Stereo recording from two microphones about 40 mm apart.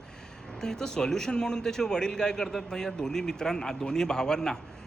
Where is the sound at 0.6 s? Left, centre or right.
Centre.